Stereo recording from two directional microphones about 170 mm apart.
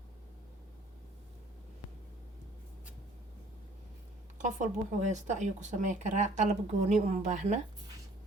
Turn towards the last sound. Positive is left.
turn(degrees=-45)  # may be behind; listen again after turning